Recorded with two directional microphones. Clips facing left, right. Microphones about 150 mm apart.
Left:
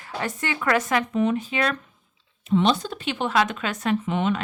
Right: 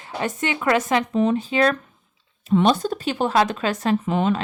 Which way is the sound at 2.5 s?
50° right (ahead or behind).